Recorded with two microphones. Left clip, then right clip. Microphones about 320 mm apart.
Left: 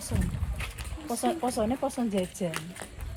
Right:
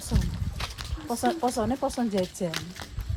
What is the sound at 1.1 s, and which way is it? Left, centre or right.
Speech, centre.